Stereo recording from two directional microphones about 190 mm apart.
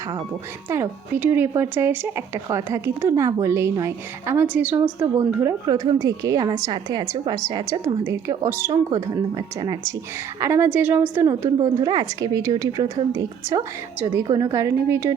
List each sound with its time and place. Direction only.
0.7 s a woman's voice: 10° right (ahead or behind)
4.9 s a woman's voice: 20° right (ahead or behind)